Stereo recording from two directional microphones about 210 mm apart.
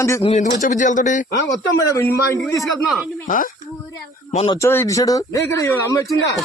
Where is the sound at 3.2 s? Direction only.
40° left (ahead or behind).